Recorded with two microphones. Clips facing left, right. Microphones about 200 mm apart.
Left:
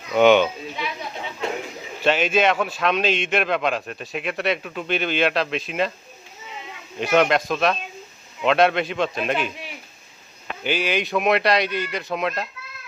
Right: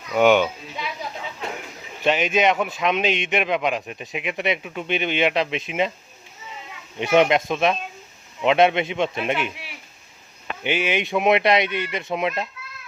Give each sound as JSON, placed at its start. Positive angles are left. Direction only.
{"t": 0.1, "sound": "speech", "side_deg": -10}
{"t": 2.0, "sound": "a man's voice", "side_deg": -15}
{"t": 7.0, "sound": "speech", "side_deg": -20}
{"t": 10.6, "sound": "speech", "side_deg": -20}